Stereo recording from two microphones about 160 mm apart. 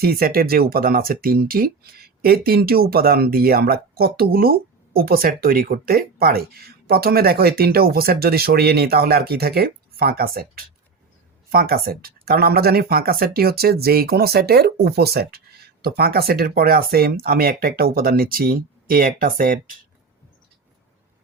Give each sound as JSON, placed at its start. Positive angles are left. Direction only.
{"t": 0.0, "sound": "speech", "side_deg": -70}
{"t": 15.8, "sound": "speech", "side_deg": -70}